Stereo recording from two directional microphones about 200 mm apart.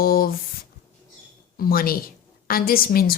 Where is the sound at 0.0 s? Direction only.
45° left (ahead or behind).